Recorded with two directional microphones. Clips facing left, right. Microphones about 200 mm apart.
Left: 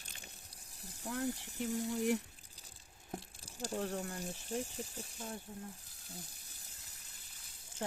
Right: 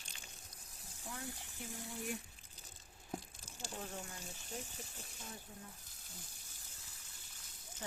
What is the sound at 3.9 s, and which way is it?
Speech, 35° left (ahead or behind).